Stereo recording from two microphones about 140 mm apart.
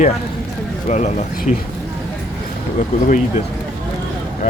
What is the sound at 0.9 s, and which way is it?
Speech, 55° left (ahead or behind).